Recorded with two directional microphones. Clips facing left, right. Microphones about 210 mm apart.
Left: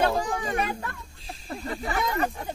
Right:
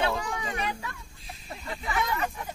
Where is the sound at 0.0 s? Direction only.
40° left (ahead or behind).